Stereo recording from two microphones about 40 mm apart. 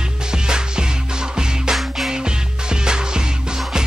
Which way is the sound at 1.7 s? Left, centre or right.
Centre.